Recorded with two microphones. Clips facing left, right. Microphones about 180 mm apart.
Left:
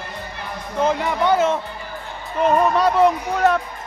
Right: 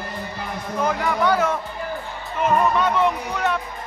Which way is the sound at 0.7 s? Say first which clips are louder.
Left 2 dB; 25° left (ahead or behind).